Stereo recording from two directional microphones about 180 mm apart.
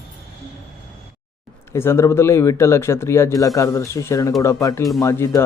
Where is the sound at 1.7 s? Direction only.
15° left (ahead or behind).